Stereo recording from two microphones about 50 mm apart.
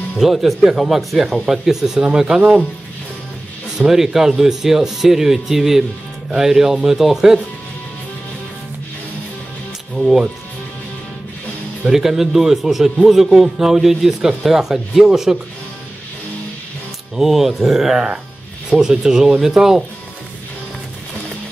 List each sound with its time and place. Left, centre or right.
0.2 s a man's voice: centre
3.7 s a man's voice: centre
11.8 s a man's voice: centre
17.1 s a man's voice: centre